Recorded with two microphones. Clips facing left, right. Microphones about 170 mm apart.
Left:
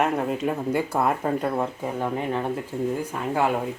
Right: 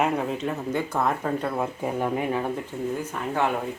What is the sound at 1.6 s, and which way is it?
Speech, 10° right (ahead or behind).